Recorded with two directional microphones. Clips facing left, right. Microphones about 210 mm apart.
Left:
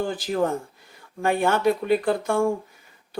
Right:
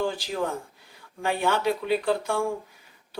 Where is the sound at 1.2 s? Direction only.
50° left (ahead or behind).